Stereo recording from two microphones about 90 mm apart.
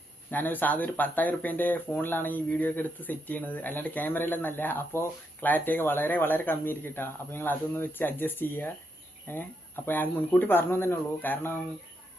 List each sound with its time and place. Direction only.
0.3 s speech: 20° left (ahead or behind)